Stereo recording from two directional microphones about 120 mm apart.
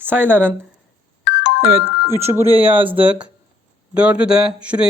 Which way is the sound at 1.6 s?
20° right (ahead or behind).